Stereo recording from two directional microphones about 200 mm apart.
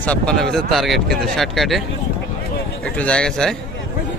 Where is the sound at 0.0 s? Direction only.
5° left (ahead or behind).